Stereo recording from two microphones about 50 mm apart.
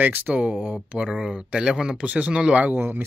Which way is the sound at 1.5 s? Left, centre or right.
Centre.